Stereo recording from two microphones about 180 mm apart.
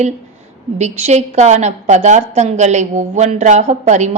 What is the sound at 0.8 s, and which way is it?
A woman's voice, 40° right (ahead or behind).